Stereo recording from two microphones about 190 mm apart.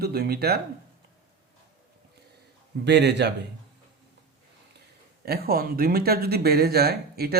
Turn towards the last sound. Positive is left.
turn(degrees=-55)  # may be behind; listen again after turning